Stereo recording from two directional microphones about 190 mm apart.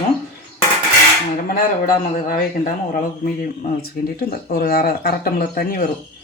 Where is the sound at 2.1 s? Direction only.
45° left (ahead or behind).